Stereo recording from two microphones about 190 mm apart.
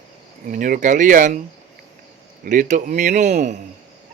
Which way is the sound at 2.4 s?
40° right (ahead or behind).